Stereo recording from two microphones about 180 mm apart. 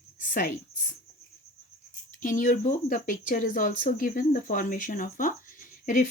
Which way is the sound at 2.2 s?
45° left (ahead or behind).